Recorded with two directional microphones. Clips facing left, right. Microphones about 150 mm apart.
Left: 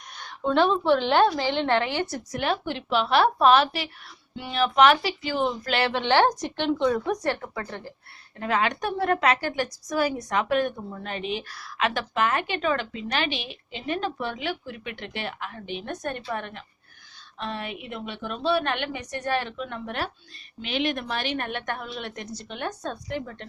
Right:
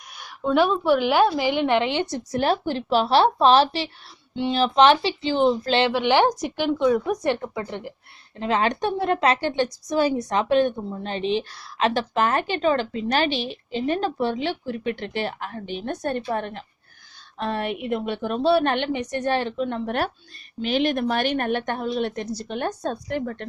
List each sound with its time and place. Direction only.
0.1 s a woman's voice: 5° right (ahead or behind); by 2.4 s 25° right (ahead or behind)
2.4 s a woman's voice: 40° right (ahead or behind)
5.9 s a woman's voice: 10° right (ahead or behind); by 16.6 s 35° right (ahead or behind)
17.3 s a woman's voice: 50° right (ahead or behind)